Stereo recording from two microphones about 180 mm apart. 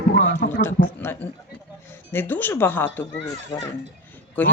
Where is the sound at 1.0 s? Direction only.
10° left (ahead or behind).